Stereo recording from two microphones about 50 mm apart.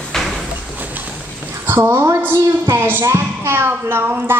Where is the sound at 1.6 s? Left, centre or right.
Right.